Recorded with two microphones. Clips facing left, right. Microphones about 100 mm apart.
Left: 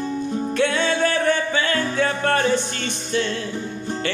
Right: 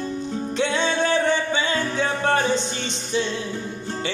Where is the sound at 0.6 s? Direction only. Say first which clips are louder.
Left 2 dB; 20° right (ahead or behind).